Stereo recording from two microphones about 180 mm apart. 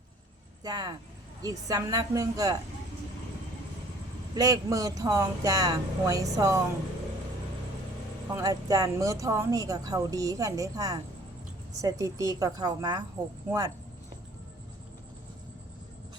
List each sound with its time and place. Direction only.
0.6 s speech: 20° right (ahead or behind)
4.4 s speech: 20° right (ahead or behind)
8.3 s speech: 20° right (ahead or behind)